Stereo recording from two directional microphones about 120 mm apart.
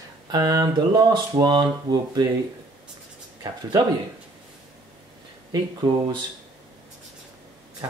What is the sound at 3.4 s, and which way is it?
Speech, 35° right (ahead or behind).